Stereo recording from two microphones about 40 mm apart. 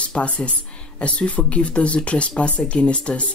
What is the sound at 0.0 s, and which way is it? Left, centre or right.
Speech, left.